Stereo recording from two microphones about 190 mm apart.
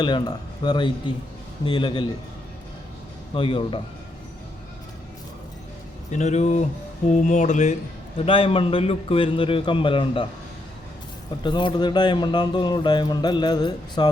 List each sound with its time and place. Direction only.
0.0 s speech: 25° left (ahead or behind)
3.3 s speech: 30° left (ahead or behind)
6.1 s speech: 40° left (ahead or behind)
11.4 s speech: 25° left (ahead or behind)